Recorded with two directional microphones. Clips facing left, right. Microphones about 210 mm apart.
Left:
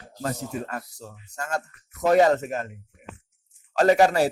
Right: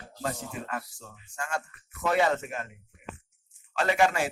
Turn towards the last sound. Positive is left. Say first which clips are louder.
# left 7 dB
turn(degrees=40)  # may be behind; listen again after turning